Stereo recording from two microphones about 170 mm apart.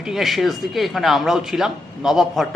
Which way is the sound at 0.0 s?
Centre (ahead or behind).